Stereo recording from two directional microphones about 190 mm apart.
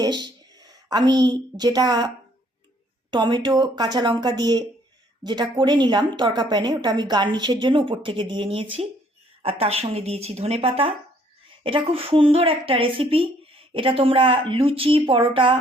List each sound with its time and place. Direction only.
0.0 s a woman's voice: 20° right (ahead or behind)
3.1 s a woman's voice: 25° right (ahead or behind)